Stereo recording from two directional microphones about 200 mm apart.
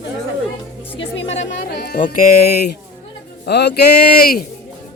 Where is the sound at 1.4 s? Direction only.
50° left (ahead or behind).